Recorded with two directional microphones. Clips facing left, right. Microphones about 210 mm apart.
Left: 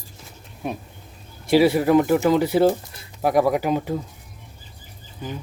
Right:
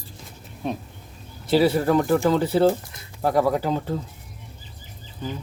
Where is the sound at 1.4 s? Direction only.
10° left (ahead or behind).